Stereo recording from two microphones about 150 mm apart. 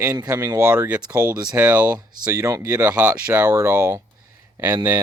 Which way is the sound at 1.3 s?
25° right (ahead or behind).